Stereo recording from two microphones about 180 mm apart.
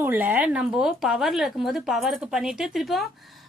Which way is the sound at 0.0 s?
10° right (ahead or behind).